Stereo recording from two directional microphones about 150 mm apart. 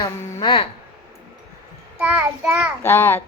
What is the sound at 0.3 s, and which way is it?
Speech, 35° left (ahead or behind).